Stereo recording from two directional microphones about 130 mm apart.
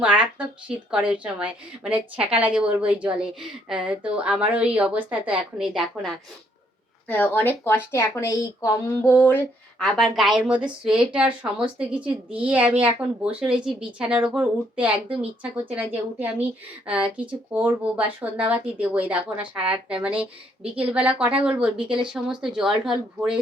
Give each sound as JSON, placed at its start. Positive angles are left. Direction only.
{"t": 0.0, "sound": "a woman's voice", "side_deg": -10}
{"t": 7.1, "sound": "speech", "side_deg": 15}
{"t": 9.7, "sound": "a woman's voice", "side_deg": 5}